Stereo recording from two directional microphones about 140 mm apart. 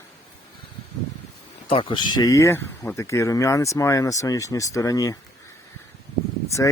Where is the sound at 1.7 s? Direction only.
40° left (ahead or behind).